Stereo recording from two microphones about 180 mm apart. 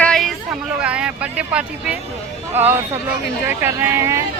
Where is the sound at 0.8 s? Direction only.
5° right (ahead or behind).